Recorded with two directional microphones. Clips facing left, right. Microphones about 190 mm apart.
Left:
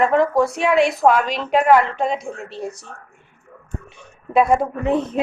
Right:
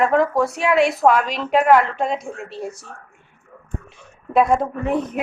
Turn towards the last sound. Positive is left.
turn(degrees=25)  # may be behind; listen again after turning